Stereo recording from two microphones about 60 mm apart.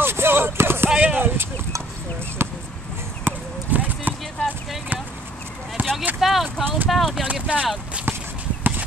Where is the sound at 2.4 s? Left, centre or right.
Right.